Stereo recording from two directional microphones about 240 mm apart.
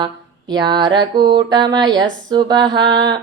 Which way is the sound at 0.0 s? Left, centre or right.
Centre.